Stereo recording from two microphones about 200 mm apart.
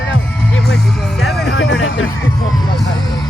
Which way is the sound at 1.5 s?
60° left (ahead or behind).